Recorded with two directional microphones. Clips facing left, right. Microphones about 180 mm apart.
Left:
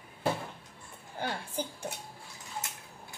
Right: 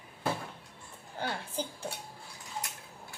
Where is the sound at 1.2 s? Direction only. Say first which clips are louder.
Left 1 dB; 10° left (ahead or behind).